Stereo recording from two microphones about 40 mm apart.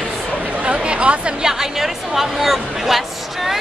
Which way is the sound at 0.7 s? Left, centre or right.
Right.